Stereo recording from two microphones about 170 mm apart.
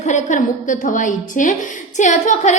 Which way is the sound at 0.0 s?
45° left (ahead or behind).